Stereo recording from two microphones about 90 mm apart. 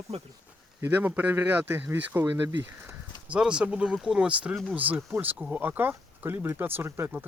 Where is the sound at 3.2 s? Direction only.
10° right (ahead or behind).